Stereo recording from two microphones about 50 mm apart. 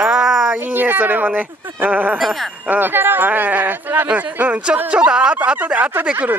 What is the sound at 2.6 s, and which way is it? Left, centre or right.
Speech, right.